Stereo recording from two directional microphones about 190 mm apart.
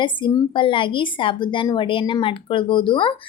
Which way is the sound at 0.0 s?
25° left (ahead or behind).